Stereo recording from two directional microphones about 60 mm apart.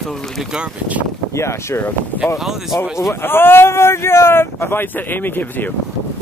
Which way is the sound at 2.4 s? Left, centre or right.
Centre.